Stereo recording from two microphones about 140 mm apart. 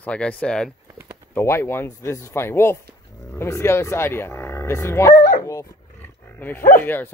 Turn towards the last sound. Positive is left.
turn(degrees=15)  # may be behind; listen again after turning